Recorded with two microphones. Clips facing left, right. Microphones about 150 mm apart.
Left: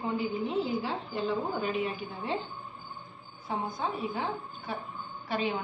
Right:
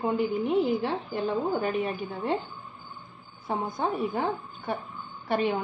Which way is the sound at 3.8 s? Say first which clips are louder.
Right 6 dB; 60° right (ahead or behind).